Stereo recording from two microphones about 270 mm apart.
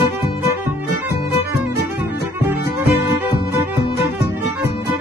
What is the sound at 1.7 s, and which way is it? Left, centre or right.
Music, left.